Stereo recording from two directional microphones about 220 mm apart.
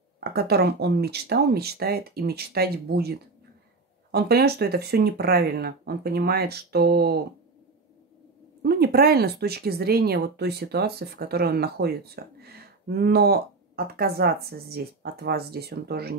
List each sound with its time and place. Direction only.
0.2 s speech: 45° right (ahead or behind)
8.6 s speech: 45° right (ahead or behind)